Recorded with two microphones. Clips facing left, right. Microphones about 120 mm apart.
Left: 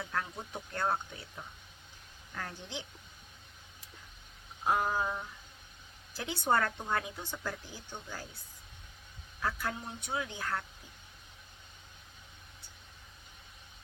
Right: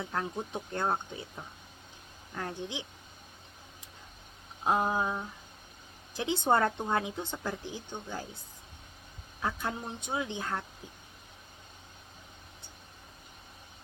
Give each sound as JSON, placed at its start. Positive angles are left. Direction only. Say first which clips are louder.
{"t": 0.0, "sound": "speech", "louder": "right 3 dB", "side_deg": -20}
{"t": 2.3, "sound": "speech", "louder": "right 5 dB", "side_deg": -15}
{"t": 4.6, "sound": "speech", "louder": "right 2 dB", "side_deg": -20}
{"t": 9.4, "sound": "speech", "louder": "right 2 dB", "side_deg": -20}